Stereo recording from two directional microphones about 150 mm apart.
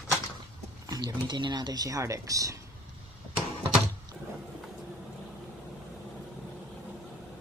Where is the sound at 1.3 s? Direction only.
30° right (ahead or behind).